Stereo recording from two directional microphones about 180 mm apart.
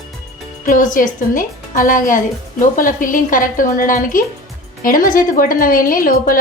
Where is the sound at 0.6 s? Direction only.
45° left (ahead or behind).